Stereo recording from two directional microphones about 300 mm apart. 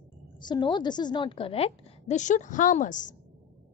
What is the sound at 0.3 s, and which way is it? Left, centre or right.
A woman's voice, centre.